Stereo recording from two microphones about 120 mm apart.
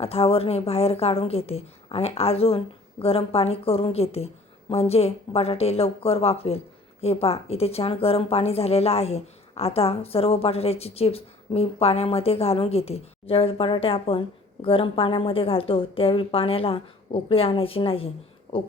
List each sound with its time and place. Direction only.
0.0 s a woman's voice: 55° left (ahead or behind)